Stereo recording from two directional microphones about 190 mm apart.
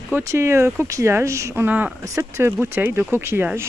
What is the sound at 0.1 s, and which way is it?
Speech, 15° right (ahead or behind).